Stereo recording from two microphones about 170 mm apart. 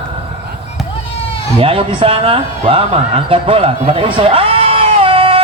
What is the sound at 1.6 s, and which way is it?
A man's voice, 35° right (ahead or behind).